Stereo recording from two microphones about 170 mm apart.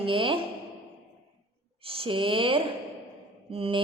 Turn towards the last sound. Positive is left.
turn(degrees=-35)  # may be behind; listen again after turning